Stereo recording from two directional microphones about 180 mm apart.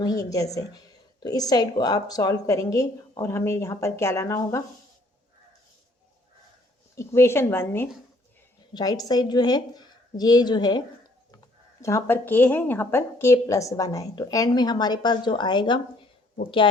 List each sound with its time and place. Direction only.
0.0 s speech: 20° left (ahead or behind)
6.9 s a woman's voice: 15° left (ahead or behind)